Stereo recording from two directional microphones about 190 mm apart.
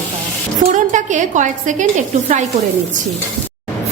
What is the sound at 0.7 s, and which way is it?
A woman's voice, 40° right (ahead or behind).